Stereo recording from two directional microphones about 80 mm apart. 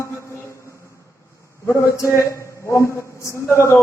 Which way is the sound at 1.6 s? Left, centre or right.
Left.